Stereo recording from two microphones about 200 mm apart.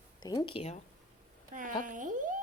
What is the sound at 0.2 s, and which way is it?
Speech, 20° left (ahead or behind).